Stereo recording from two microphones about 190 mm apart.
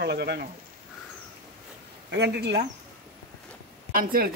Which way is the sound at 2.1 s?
65° right (ahead or behind).